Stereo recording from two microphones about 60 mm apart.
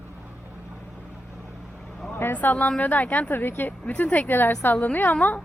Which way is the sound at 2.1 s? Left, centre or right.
Left.